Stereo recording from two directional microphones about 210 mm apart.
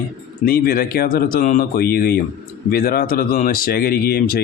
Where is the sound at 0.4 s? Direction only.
45° left (ahead or behind).